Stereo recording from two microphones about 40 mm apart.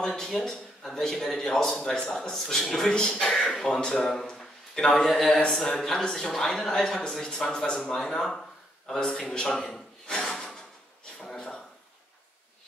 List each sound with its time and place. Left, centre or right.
0.0 s a man's voice: centre
2.9 s speech: left
3.3 s speech: centre
3.8 s a man's voice: centre
4.2 s a sound: centre
4.9 s a man's voice: centre
8.8 s a sound: centre